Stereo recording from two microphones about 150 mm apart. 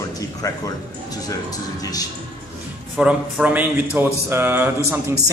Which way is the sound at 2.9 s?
10° right (ahead or behind).